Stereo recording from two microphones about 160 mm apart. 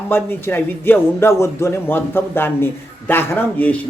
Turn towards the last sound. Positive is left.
turn(degrees=10)  # may be behind; listen again after turning